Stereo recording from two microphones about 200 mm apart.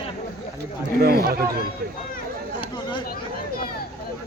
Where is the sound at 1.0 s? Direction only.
50° right (ahead or behind).